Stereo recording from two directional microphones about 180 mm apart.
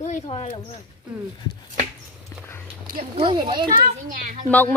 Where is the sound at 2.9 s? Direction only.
55° right (ahead or behind).